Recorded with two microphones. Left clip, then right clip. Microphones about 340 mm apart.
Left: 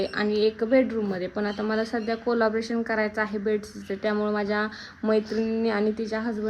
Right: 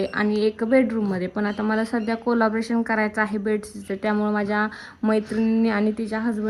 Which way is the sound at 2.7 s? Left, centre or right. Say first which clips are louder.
Right 3 dB; right.